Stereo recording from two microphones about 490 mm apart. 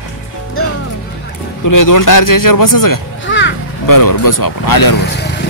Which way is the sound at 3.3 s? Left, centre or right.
Left.